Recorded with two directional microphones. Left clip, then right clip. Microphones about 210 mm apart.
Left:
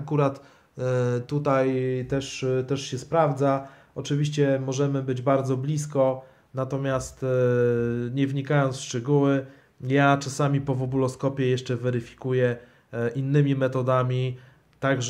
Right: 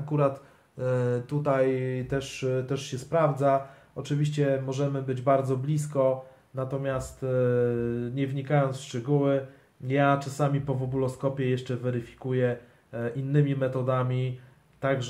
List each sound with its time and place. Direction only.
0.1 s speech: 45° left (ahead or behind)
0.7 s mantra: 40° left (ahead or behind)
9.8 s speech: 45° left (ahead or behind)